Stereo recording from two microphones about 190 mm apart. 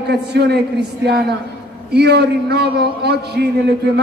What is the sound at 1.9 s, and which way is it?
A man's voice, 60° right (ahead or behind).